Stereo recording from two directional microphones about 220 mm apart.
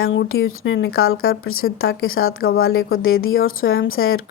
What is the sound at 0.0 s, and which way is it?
A woman's voice, 60° left (ahead or behind).